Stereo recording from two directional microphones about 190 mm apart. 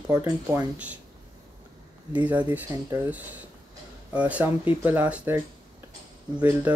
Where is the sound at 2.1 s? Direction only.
10° right (ahead or behind).